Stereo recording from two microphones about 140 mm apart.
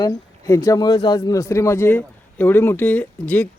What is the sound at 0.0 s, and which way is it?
Speech, 25° left (ahead or behind).